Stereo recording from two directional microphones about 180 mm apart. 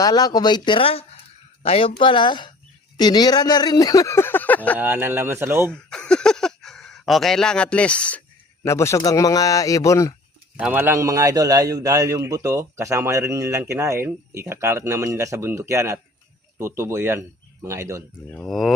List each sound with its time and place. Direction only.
0.0 s speech: 20° left (ahead or behind)
4.8 s a man's voice: 10° right (ahead or behind)
5.7 s speech: 5° left (ahead or behind)
10.6 s a man's voice: 10° right (ahead or behind)
18.3 s speech: 5° left (ahead or behind)